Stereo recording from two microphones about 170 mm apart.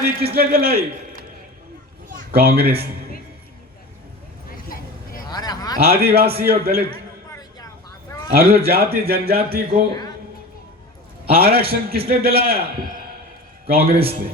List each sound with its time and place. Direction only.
0.2 s a man's voice: 65° right (ahead or behind)
2.0 s children playing: 60° right (ahead or behind)
4.5 s vehicle: 55° left (ahead or behind)
5.3 s a sound: 25° left (ahead or behind)
5.7 s a man's voice: 65° right (ahead or behind)
8.3 s a man's voice: 65° right (ahead or behind)
9.9 s a sound: 25° left (ahead or behind)
11.3 s a man's voice: 65° right (ahead or behind)